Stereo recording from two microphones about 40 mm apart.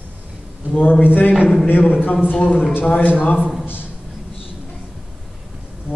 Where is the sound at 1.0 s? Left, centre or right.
Left.